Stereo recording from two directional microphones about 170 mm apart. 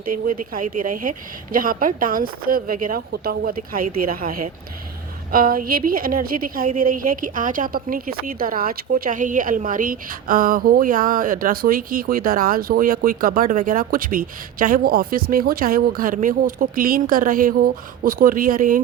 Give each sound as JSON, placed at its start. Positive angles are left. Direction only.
{"t": 0.1, "sound": "a woman's voice", "side_deg": -55}